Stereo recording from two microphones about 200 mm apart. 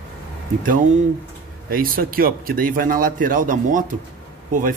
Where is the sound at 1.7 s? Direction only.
45° right (ahead or behind).